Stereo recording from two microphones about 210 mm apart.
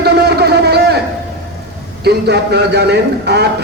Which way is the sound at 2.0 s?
50° right (ahead or behind).